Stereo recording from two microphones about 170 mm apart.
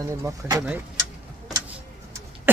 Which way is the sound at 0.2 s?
20° right (ahead or behind).